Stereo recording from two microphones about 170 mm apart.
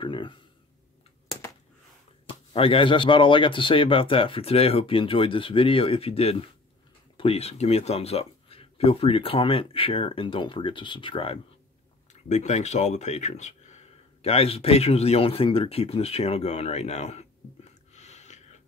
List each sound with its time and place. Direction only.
0.0 s a sound: 30° left (ahead or behind)
2.5 s speech: 35° left (ahead or behind)
12.1 s speech: 45° left (ahead or behind)